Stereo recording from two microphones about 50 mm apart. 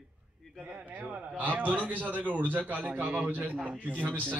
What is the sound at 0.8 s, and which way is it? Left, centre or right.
A man's voice, right.